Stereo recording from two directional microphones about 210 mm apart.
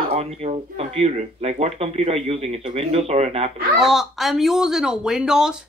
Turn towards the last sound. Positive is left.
turn(degrees=-5)  # may be behind; listen again after turning